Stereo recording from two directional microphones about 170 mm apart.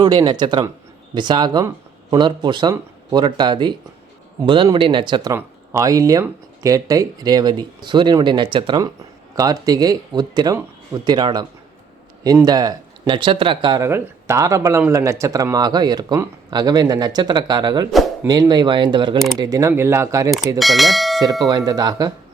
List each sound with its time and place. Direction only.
0.0 s speech: 25° right (ahead or behind)
5.3 s speech: 15° right (ahead or behind)
20.6 s speech: centre (ahead or behind)
21.4 s speech: 20° right (ahead or behind)